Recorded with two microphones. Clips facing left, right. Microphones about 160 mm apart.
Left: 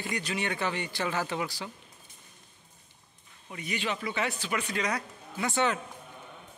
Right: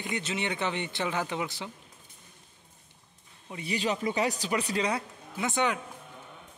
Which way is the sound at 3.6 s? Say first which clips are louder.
Right 3 dB; 35° right (ahead or behind).